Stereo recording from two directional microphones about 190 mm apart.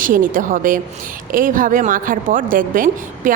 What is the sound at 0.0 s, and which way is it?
A woman's voice, 45° right (ahead or behind).